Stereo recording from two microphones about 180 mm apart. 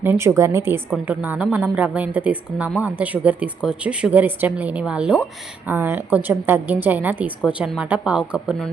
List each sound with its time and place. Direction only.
0.0 s a woman's voice: 15° right (ahead or behind)